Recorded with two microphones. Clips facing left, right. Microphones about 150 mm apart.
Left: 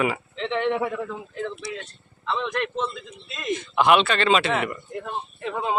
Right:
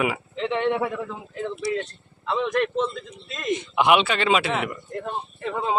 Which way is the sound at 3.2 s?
5° left (ahead or behind).